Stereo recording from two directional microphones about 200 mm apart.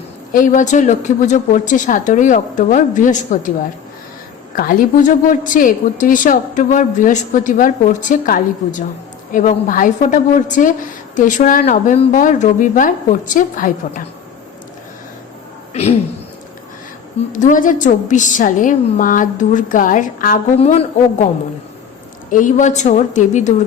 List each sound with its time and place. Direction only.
0.3 s a woman's voice: 40° left (ahead or behind)
4.5 s a woman's voice: 45° left (ahead or behind)
15.7 s speech: 30° left (ahead or behind)
17.3 s a woman's voice: 40° left (ahead or behind)
22.3 s a woman's voice: 40° left (ahead or behind)